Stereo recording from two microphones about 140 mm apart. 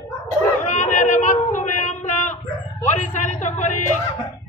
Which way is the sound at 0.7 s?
60° left (ahead or behind).